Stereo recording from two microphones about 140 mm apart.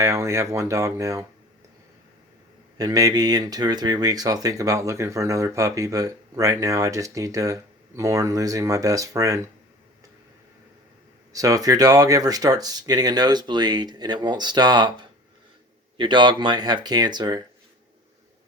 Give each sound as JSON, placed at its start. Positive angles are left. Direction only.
{"t": 0.0, "sound": "speech", "side_deg": -20}
{"t": 2.7, "sound": "speech", "side_deg": -25}
{"t": 11.3, "sound": "speech", "side_deg": -25}
{"t": 16.0, "sound": "speech", "side_deg": -35}